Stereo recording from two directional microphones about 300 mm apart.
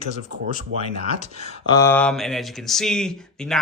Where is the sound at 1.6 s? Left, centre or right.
Centre.